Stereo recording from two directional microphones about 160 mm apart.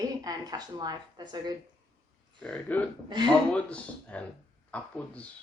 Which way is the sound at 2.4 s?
10° left (ahead or behind).